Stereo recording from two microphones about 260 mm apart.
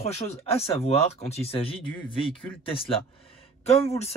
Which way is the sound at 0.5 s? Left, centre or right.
Left.